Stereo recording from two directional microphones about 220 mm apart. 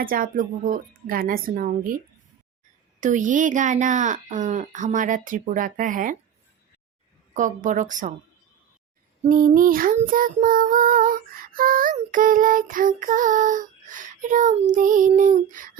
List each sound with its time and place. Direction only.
0.0 s child singing: 40° right (ahead or behind)
3.0 s child singing: 35° right (ahead or behind)
7.3 s child singing: 35° right (ahead or behind)
9.3 s child singing: 40° right (ahead or behind)